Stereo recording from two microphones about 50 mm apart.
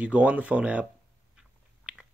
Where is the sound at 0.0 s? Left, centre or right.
Right.